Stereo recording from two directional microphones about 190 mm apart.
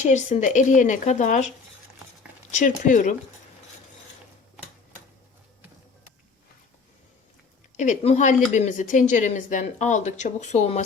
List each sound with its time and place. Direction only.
0.0 s speech: 40° left (ahead or behind)
2.5 s speech: 45° left (ahead or behind)
7.8 s speech: 35° left (ahead or behind)